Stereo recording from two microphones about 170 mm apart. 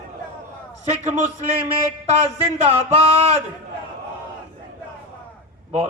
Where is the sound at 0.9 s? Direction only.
40° right (ahead or behind).